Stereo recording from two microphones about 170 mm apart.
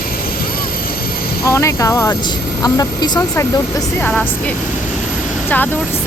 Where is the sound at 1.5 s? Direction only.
15° left (ahead or behind).